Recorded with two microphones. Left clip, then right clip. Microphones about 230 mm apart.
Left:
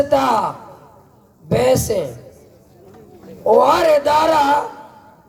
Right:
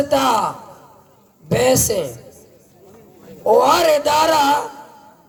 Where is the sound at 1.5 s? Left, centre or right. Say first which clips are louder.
Even; right.